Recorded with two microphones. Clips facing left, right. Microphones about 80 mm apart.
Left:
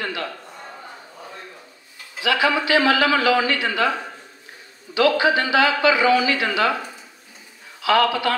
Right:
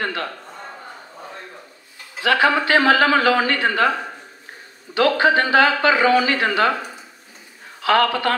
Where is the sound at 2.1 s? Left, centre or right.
Right.